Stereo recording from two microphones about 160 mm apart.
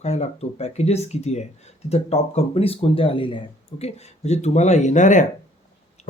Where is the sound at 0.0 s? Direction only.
45° left (ahead or behind).